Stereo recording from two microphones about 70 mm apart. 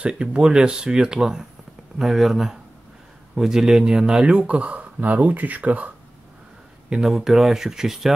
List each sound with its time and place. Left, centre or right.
0.0 s speech: centre
6.9 s speech: centre